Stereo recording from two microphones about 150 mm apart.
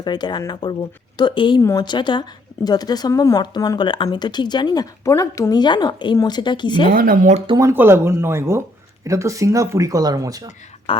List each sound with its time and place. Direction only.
0.0 s speech: 30° left (ahead or behind)
6.9 s speech: 70° right (ahead or behind)
7.5 s speech: 20° right (ahead or behind)
10.9 s speech: 35° left (ahead or behind)